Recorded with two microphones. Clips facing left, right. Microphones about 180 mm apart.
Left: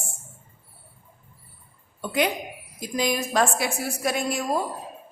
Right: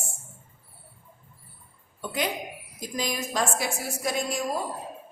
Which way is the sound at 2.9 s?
65° left (ahead or behind).